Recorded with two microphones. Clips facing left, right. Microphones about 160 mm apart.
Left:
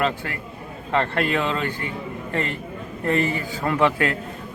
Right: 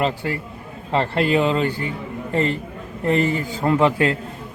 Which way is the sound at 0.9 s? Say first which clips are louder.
Right 3 dB; 25° right (ahead or behind).